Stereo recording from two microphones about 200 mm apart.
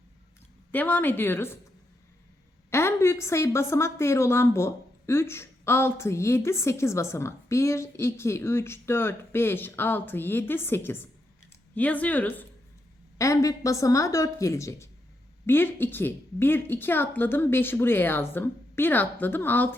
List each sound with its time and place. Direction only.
0.7 s a woman's voice: 10° left (ahead or behind)
2.6 s a woman's voice: 15° left (ahead or behind)